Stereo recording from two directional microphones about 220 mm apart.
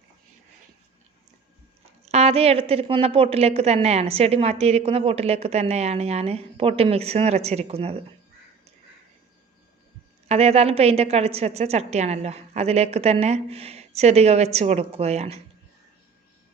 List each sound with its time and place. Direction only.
2.0 s a woman's voice: 30° right (ahead or behind)
10.2 s a woman's voice: 30° right (ahead or behind)